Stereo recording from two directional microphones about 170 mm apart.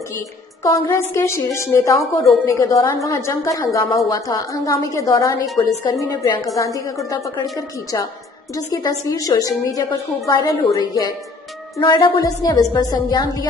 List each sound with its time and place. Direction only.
0.7 s a woman's voice: 20° left (ahead or behind)